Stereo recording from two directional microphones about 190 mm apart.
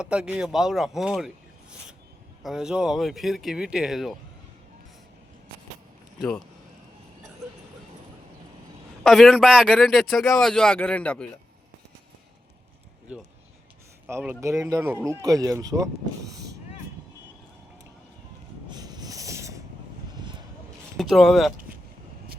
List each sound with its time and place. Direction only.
0.0 s speech: 5° right (ahead or behind)
2.4 s speech: 5° right (ahead or behind)
6.1 s speech: 5° left (ahead or behind)
9.0 s speech: centre (ahead or behind)
14.1 s speech: 10° right (ahead or behind)
18.7 s vehicle: 20° right (ahead or behind)
20.9 s speech: centre (ahead or behind)